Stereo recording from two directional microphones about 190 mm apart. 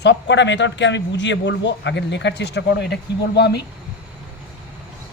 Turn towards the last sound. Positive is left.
turn(degrees=60)  # may be behind; listen again after turning